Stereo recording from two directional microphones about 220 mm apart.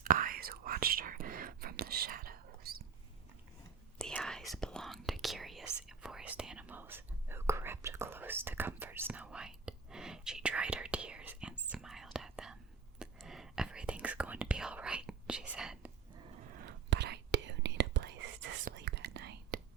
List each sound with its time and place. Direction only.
0.0 s whispering: 40° right (ahead or behind)
3.9 s whispering: 5° left (ahead or behind)
16.5 s whispering: 50° right (ahead or behind)